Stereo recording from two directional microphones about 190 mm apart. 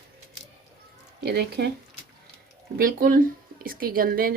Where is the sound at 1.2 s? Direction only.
60° right (ahead or behind).